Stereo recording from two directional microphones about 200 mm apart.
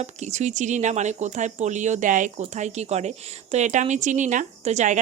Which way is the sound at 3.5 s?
35° right (ahead or behind).